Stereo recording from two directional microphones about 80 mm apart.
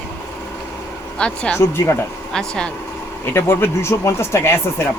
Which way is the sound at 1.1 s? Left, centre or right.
Centre.